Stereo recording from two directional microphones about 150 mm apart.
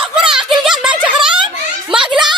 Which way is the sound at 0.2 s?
5° right (ahead or behind).